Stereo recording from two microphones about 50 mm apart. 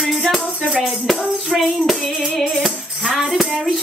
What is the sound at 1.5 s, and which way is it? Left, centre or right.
Music, centre.